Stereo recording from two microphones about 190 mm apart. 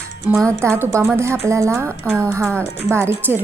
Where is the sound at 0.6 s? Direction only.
15° right (ahead or behind).